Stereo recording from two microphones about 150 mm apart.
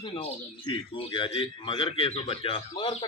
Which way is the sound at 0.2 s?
35° left (ahead or behind).